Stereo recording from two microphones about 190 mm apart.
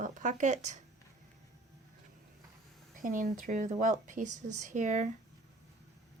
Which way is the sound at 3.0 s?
45° right (ahead or behind).